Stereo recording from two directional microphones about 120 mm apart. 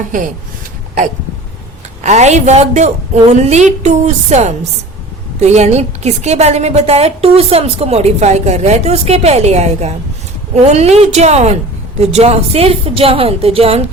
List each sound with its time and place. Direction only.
2.0 s a woman's voice: 70° right (ahead or behind); by 13.8 s 55° right (ahead or behind)